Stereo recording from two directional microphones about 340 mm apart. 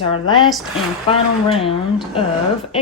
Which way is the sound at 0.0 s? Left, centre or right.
Centre.